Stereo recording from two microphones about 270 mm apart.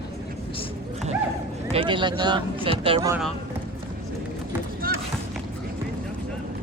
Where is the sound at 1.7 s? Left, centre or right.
Centre.